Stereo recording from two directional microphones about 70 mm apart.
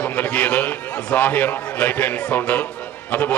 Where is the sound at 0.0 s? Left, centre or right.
Centre.